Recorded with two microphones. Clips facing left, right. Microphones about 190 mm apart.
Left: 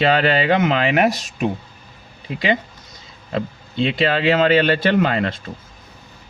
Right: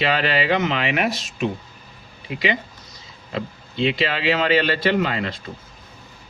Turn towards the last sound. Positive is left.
turn(degrees=50)  # may be behind; listen again after turning